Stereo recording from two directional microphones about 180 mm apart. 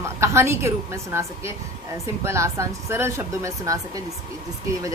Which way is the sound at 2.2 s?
15° right (ahead or behind).